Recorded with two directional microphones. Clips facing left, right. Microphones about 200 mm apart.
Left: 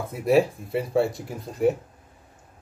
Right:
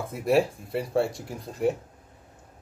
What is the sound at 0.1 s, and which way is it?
Speech, centre (ahead or behind).